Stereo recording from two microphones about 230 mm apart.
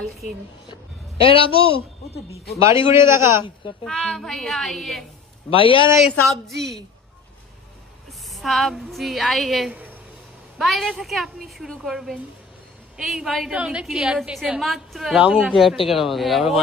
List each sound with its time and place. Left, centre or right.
1.2 s a man's voice: left
2.7 s a man's voice: centre
3.8 s a woman's voice: centre
5.5 s a man's voice: left
5.9 s a woman's voice: centre
8.3 s a woman's voice: centre